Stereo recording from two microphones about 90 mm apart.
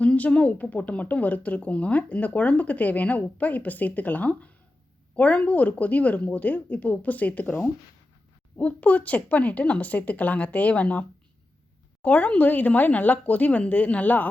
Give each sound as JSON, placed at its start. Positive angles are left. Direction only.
{"t": 0.0, "sound": "speech", "side_deg": 15}
{"t": 12.0, "sound": "speech", "side_deg": 15}